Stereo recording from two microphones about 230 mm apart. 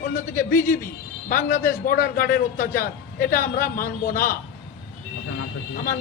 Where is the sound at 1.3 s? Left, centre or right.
Left.